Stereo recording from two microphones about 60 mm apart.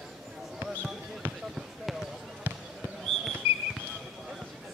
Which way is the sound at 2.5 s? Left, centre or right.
Right.